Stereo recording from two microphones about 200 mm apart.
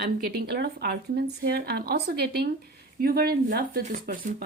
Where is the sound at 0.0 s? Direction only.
50° right (ahead or behind).